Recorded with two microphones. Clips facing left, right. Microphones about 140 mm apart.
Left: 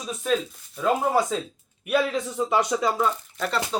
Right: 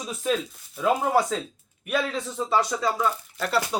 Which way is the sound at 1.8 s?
10° left (ahead or behind).